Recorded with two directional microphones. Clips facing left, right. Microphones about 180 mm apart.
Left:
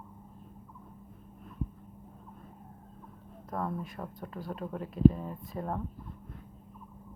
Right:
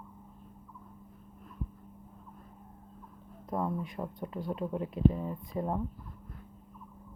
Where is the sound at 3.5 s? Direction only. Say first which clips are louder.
Right 2 dB; 20° right (ahead or behind).